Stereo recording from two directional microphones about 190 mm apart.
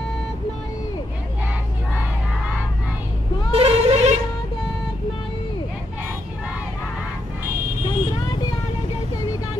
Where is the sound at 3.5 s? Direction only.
30° right (ahead or behind).